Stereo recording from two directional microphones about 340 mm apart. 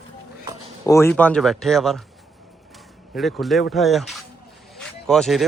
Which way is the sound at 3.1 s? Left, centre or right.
Centre.